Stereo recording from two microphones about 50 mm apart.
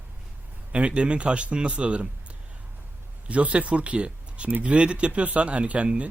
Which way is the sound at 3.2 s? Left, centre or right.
Right.